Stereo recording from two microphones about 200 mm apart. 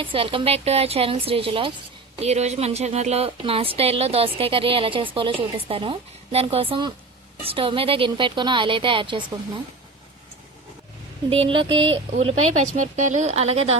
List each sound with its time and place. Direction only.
0.0 s a woman's voice: 25° right (ahead or behind)
11.3 s a woman's voice: 25° right (ahead or behind)